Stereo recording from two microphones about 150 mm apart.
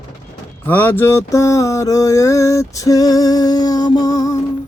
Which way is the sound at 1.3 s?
20° left (ahead or behind).